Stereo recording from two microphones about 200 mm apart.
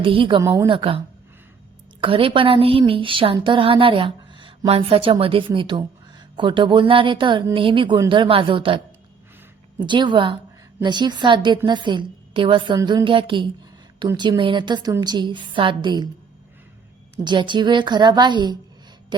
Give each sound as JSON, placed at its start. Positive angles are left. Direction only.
{"t": 0.0, "sound": "a woman's voice", "side_deg": -25}
{"t": 9.8, "sound": "a woman's voice", "side_deg": -25}
{"t": 17.2, "sound": "a woman's voice", "side_deg": -25}